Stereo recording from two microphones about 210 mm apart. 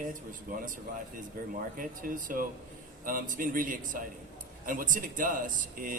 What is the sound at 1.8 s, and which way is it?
A man's voice, 40° right (ahead or behind).